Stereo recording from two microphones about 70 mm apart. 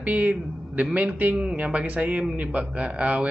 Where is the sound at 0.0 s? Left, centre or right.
Centre.